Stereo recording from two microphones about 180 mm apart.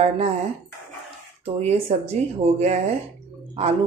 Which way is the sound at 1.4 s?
35° right (ahead or behind).